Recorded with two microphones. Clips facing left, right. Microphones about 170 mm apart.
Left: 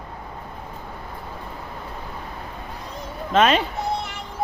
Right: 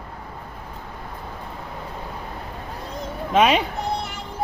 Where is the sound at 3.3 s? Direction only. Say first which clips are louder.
Even; 10° right (ahead or behind).